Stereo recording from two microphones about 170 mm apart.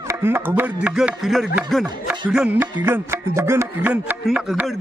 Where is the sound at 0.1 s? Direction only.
15° right (ahead or behind).